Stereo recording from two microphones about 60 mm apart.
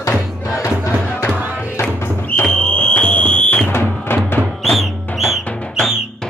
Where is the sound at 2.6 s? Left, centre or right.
Left.